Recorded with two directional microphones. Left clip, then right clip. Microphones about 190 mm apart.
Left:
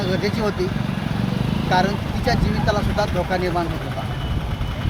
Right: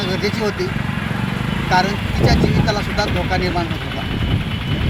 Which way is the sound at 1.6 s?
5° left (ahead or behind).